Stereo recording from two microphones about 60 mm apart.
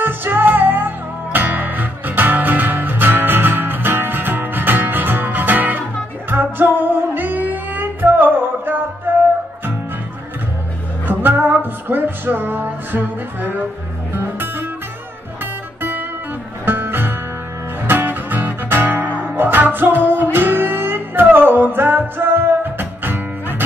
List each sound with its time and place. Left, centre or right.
0.0 s music: right
11.1 s music: right
16.6 s music: right